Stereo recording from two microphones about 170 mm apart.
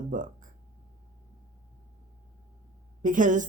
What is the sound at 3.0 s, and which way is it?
Speech, 50° right (ahead or behind).